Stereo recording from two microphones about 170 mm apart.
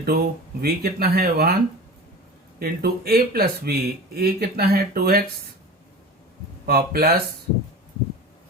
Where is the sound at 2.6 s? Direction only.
65° right (ahead or behind).